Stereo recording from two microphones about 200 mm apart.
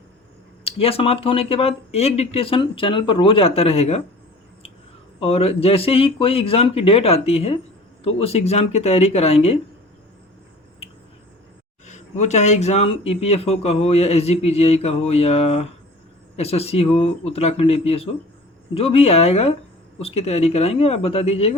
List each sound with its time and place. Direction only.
0.6 s speech: 30° left (ahead or behind)
5.2 s speech: 30° left (ahead or behind)
11.9 s speech: 35° left (ahead or behind)